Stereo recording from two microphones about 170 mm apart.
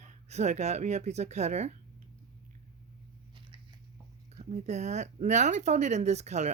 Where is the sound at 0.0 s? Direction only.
40° right (ahead or behind).